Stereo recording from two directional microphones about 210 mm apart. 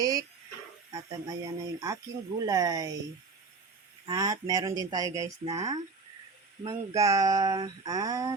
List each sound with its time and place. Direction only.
0.0 s a sound: 15° right (ahead or behind)
0.9 s speech: 15° right (ahead or behind)
4.0 s speech: 15° right (ahead or behind)